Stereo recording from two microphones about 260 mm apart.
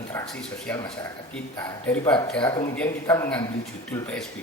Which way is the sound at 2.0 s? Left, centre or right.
Centre.